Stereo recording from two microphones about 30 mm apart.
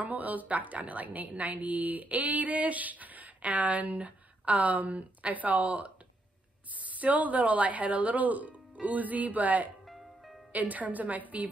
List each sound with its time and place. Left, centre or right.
0.0 s a woman's voice: right
9.8 s music: centre
10.5 s speech: right